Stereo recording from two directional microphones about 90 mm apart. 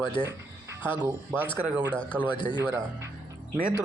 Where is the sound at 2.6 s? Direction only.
20° right (ahead or behind).